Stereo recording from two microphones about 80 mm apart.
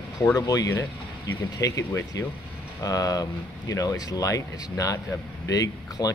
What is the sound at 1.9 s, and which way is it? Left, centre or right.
Speech, left.